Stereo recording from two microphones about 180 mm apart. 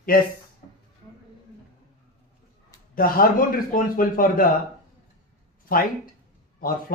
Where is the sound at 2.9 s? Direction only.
50° left (ahead or behind).